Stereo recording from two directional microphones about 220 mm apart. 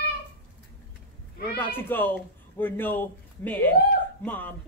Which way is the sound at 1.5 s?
10° left (ahead or behind).